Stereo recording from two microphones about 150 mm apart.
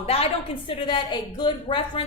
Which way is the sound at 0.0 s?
40° left (ahead or behind).